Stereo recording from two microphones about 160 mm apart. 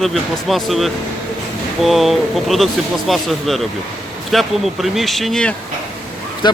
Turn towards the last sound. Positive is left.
turn(degrees=30)  # may be behind; listen again after turning